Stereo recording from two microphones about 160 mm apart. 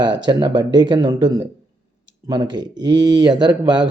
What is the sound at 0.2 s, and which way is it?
Speech, 30° right (ahead or behind).